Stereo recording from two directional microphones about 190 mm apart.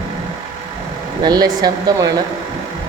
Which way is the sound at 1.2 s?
20° right (ahead or behind).